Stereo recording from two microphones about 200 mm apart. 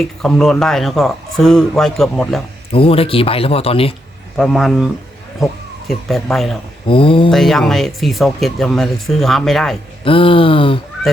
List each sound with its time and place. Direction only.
0.0 s speech: 5° left (ahead or behind)
2.7 s a man's voice: 25° left (ahead or behind)
4.4 s speech: centre (ahead or behind)
5.9 s speech: centre (ahead or behind)
6.8 s a man's voice: 25° left (ahead or behind)
7.3 s speech: centre (ahead or behind)
10.0 s a man's voice: 25° left (ahead or behind)